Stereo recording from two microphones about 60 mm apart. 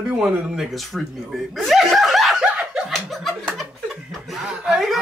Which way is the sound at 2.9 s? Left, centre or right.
Centre.